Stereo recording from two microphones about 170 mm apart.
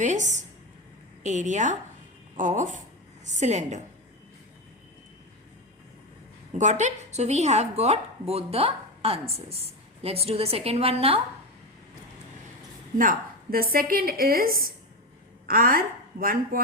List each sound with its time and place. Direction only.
0.0 s a woman's voice: 45° right (ahead or behind)
6.5 s a woman's voice: 45° right (ahead or behind)
13.0 s a woman's voice: 55° right (ahead or behind)